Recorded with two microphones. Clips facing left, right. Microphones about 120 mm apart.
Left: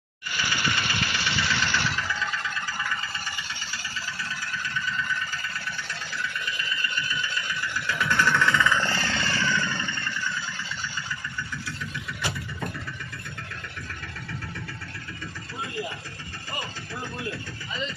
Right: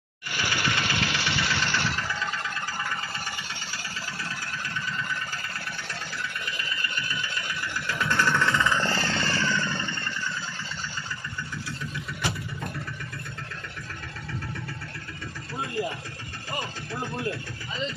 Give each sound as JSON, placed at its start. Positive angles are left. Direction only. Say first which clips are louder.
{"t": 0.3, "sound": "engine", "louder": "even", "side_deg": -60}
{"t": 1.5, "sound": "vehicle", "louder": "left 1 dB", "side_deg": -35}
{"t": 6.4, "sound": "vehicle", "louder": "left 2 dB", "side_deg": -50}
{"t": 7.9, "sound": "vehicle", "louder": "left 1 dB", "side_deg": -35}
{"t": 8.8, "sound": "a sound", "louder": "right 1 dB", "side_deg": -35}
{"t": 9.2, "sound": "vehicle", "louder": "even", "side_deg": -35}